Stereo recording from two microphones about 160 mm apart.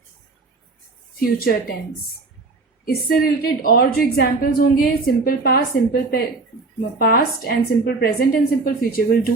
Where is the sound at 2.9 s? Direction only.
70° left (ahead or behind).